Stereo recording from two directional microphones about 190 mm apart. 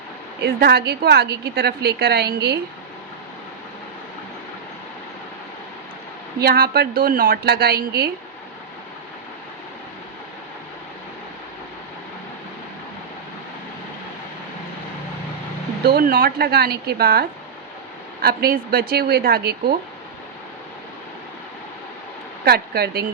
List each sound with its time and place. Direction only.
0.4 s a woman's voice: 55° right (ahead or behind)
6.4 s a woman's voice: 55° right (ahead or behind)
15.8 s a woman's voice: 55° right (ahead or behind)
22.4 s a woman's voice: 55° right (ahead or behind)